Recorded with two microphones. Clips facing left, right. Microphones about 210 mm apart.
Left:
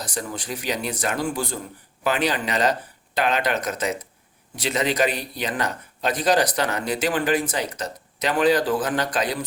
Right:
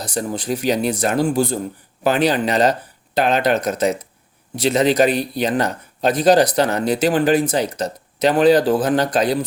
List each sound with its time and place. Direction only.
0.1 s speech: 35° right (ahead or behind)